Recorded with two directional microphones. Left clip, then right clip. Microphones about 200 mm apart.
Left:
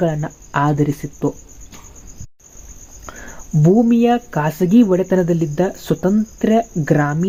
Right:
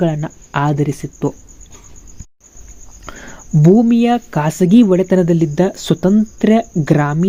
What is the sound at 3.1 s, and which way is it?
Cricket, 30° right (ahead or behind).